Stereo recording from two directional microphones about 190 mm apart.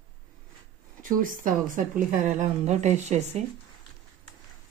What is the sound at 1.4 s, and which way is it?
A woman's voice, 45° right (ahead or behind).